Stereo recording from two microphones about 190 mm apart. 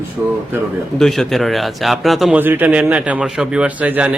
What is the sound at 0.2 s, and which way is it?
Speech, 5° right (ahead or behind).